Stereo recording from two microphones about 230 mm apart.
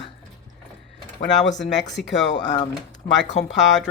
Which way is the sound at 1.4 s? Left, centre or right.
Left.